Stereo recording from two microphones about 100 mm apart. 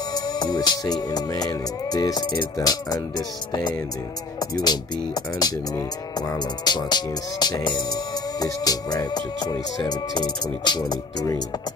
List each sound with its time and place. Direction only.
0.1 s music: 45° left (ahead or behind)